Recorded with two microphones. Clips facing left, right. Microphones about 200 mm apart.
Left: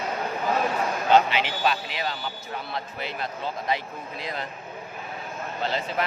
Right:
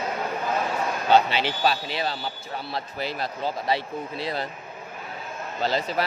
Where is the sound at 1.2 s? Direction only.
35° right (ahead or behind).